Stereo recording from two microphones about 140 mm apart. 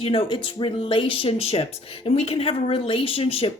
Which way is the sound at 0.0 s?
40° left (ahead or behind).